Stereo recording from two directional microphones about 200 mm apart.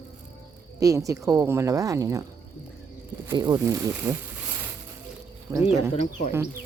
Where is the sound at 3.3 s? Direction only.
20° right (ahead or behind).